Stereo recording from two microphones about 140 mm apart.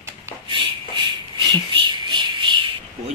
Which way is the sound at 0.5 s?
35° right (ahead or behind).